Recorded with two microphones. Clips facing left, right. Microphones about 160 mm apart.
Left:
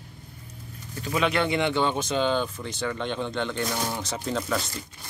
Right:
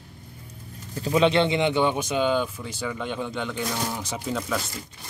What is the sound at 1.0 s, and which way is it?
Speech, 25° right (ahead or behind).